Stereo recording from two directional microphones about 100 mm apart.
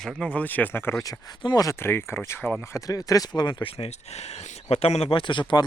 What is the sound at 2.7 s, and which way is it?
Speech, 35° left (ahead or behind).